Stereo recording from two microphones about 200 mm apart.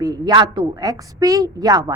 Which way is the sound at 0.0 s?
20° right (ahead or behind).